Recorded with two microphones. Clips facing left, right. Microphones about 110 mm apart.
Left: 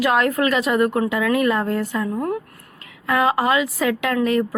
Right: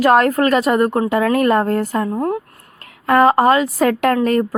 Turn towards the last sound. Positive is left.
turn(degrees=-45)  # may be behind; listen again after turning